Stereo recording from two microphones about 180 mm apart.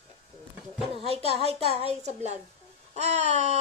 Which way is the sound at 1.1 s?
35° right (ahead or behind).